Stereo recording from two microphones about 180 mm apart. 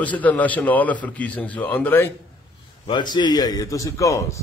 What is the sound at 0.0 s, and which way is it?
A man's voice, 10° left (ahead or behind).